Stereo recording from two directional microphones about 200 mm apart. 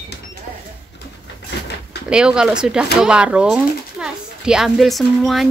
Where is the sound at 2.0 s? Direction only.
5° right (ahead or behind).